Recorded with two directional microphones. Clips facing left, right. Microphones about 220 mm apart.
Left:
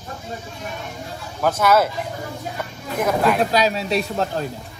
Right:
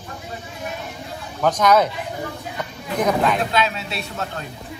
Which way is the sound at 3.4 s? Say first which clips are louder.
Left 3 dB; 40° left (ahead or behind).